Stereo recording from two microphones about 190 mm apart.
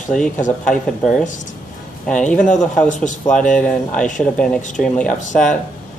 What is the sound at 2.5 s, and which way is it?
Speech, 5° left (ahead or behind).